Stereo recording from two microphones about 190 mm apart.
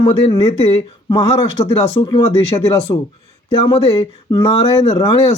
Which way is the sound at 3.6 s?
30° left (ahead or behind).